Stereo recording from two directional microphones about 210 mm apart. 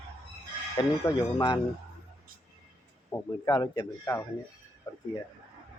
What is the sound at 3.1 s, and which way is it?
A man's voice, 20° left (ahead or behind).